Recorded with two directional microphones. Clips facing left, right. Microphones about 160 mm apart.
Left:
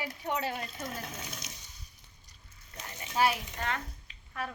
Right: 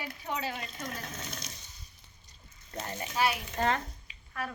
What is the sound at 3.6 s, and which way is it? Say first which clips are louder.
Speech: right 8 dB; 35° right (ahead or behind).